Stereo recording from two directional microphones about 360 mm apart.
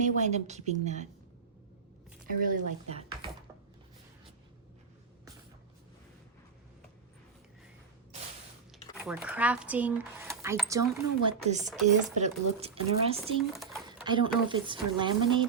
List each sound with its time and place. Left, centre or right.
0.0 s a woman's voice: centre
2.4 s a woman's voice: right
9.0 s speech: centre
13.5 s a sound: centre
14.0 s speech: centre